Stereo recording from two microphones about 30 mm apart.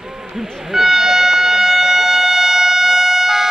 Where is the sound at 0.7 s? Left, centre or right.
Centre.